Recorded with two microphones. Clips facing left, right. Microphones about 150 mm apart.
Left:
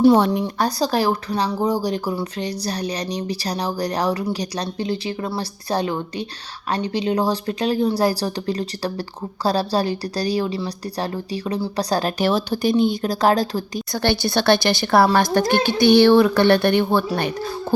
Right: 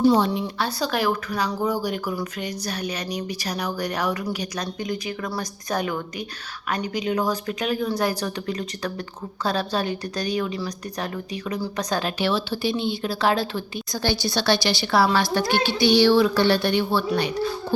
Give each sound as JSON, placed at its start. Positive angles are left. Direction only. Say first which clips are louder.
{"t": 0.1, "sound": "speech", "louder": "left 4 dB", "side_deg": 55}
{"t": 0.4, "sound": "speech", "louder": "left 5 dB", "side_deg": 40}
{"t": 13.9, "sound": "a woman's voice", "louder": "left 4 dB", "side_deg": 60}